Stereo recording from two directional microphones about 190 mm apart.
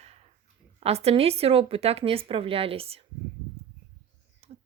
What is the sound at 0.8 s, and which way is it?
Speech, 30° right (ahead or behind).